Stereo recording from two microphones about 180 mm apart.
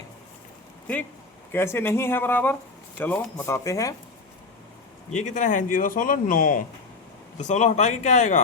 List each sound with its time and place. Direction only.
1.5 s speech: 15° left (ahead or behind)
5.1 s speech: 45° left (ahead or behind)